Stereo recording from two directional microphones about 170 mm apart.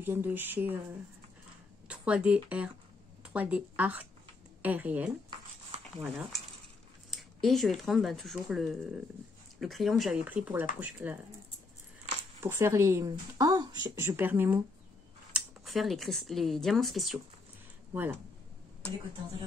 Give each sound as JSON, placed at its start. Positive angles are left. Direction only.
{"t": 0.0, "sound": "speech", "side_deg": -10}
{"t": 1.9, "sound": "speech", "side_deg": -5}
{"t": 5.3, "sound": "a sound", "side_deg": -25}
{"t": 7.1, "sound": "speech", "side_deg": 0}
{"t": 12.4, "sound": "speech", "side_deg": -15}
{"t": 15.3, "sound": "speech", "side_deg": 0}